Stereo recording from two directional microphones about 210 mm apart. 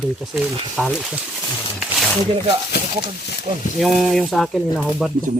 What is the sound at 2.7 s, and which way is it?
Speech, 50° left (ahead or behind).